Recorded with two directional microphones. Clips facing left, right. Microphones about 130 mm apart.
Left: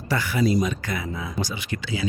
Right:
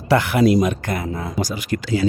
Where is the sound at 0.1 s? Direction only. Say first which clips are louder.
Right 7 dB; 65° right (ahead or behind).